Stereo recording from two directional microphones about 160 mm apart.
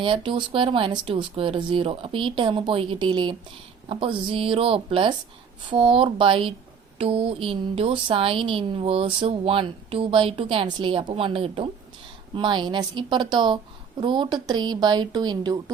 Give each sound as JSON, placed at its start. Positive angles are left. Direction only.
{"t": 0.0, "sound": "a woman's voice", "side_deg": -30}